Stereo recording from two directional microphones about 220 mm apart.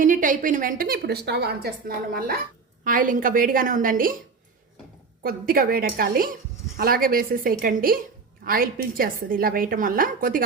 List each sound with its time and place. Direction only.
0.0 s a woman's voice: 35° right (ahead or behind)
5.2 s a woman's voice: 40° right (ahead or behind)